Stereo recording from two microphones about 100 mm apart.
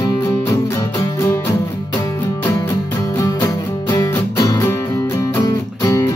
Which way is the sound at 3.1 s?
35° left (ahead or behind).